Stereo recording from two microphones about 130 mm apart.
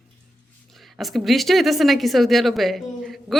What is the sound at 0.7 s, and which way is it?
A woman's voice, centre (ahead or behind).